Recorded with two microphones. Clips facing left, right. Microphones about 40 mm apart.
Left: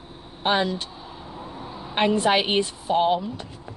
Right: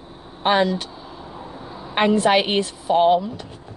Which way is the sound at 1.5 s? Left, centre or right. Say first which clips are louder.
Right 1 dB; centre.